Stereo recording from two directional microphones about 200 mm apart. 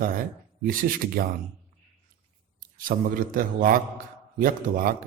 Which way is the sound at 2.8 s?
45° right (ahead or behind).